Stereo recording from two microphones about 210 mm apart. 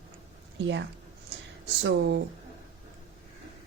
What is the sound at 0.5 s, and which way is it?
Speech, 60° right (ahead or behind).